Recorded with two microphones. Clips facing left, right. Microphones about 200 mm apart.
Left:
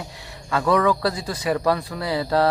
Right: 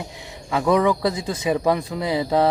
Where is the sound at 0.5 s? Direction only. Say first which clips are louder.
Right 1 dB; 15° right (ahead or behind).